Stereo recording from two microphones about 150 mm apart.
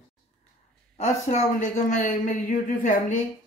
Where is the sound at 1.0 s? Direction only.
50° left (ahead or behind).